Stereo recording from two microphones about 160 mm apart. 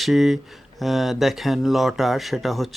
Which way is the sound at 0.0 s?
Centre (ahead or behind).